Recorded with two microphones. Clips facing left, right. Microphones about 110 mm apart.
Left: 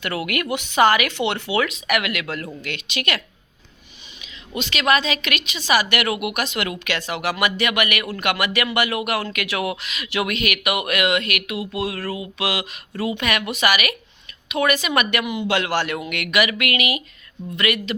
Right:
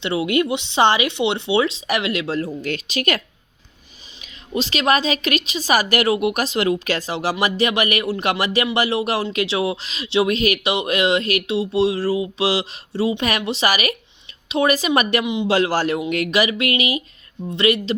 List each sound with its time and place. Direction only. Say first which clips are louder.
0.0 s a woman's voice: right 6 dB; 25° right (ahead or behind); by 3.2 s 40° right (ahead or behind)
4.5 s a woman's voice: right 2 dB; 35° right (ahead or behind)
15.2 s speech: right 3 dB; 20° right (ahead or behind)
15.4 s a woman's voice: right 4 dB; 35° right (ahead or behind)